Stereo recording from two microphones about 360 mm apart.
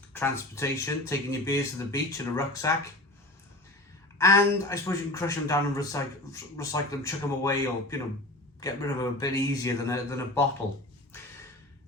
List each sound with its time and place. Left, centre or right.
0.1 s speech: centre
4.7 s speech: centre